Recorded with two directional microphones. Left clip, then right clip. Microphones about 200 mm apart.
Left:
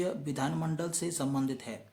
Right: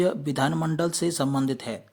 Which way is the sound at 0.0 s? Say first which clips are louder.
Right 9 dB; 40° right (ahead or behind).